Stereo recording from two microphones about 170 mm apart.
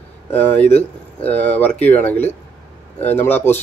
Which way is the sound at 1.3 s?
10° left (ahead or behind).